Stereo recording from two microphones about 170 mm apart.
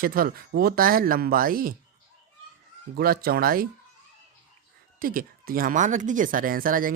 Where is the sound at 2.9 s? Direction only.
60° right (ahead or behind).